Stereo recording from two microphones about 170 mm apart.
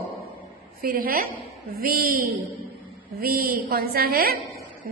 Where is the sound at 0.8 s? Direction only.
55° right (ahead or behind).